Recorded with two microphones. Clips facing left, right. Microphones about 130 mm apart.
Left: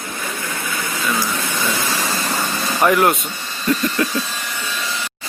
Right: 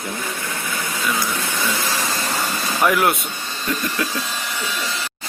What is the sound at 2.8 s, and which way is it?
Speech, centre (ahead or behind).